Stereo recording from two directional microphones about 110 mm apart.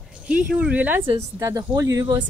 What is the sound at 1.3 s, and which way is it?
Speech, 30° right (ahead or behind).